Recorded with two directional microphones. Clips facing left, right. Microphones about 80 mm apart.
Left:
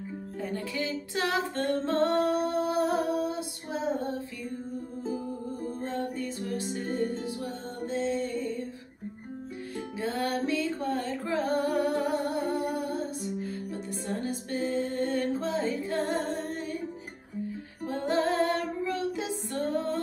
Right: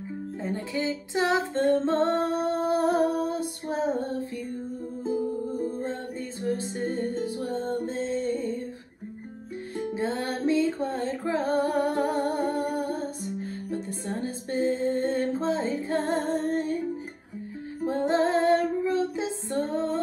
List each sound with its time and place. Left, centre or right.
0.4 s female singing: right
5.6 s music: right
9.8 s music: right
17.8 s music: right